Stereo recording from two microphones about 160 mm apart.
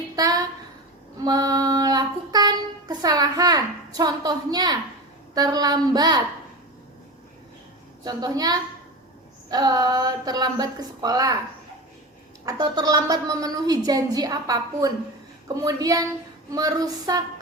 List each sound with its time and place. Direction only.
0.2 s a sound: 20° right (ahead or behind)
1.2 s a woman's voice: 25° right (ahead or behind)
8.0 s a woman's voice: 25° right (ahead or behind)
12.5 s a woman's voice: 25° right (ahead or behind)